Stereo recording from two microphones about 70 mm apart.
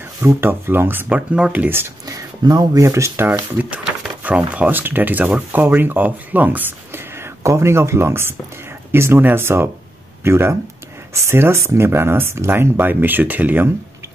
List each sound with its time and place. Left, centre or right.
0.4 s speech: right
1.0 s speech: centre
2.4 s speech: right
2.8 s speech: right
3.5 s a sound: right
4.5 s speech: right